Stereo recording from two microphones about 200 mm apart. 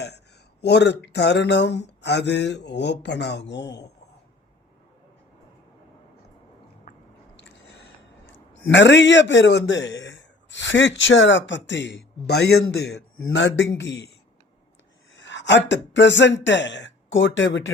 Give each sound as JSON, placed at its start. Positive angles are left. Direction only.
{"t": 0.6, "sound": "a man's voice", "side_deg": 60}
{"t": 7.3, "sound": "biting", "side_deg": 60}
{"t": 8.7, "sound": "a man's voice", "side_deg": 60}
{"t": 15.1, "sound": "speech", "side_deg": 65}